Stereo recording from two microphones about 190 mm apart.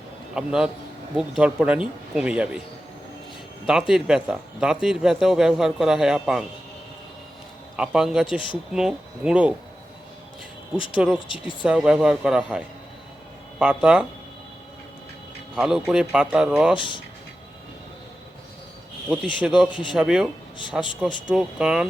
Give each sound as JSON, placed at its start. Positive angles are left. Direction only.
{"t": 0.3, "sound": "speech", "side_deg": -5}
{"t": 3.7, "sound": "speech", "side_deg": -5}
{"t": 7.8, "sound": "speech", "side_deg": -5}
{"t": 11.0, "sound": "speech", "side_deg": -5}
{"t": 15.5, "sound": "speech", "side_deg": -5}
{"t": 16.7, "sound": "speech", "side_deg": 25}
{"t": 19.1, "sound": "speech", "side_deg": -5}